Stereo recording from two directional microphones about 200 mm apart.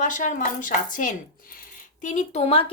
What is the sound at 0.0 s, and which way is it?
A woman's voice, 40° left (ahead or behind).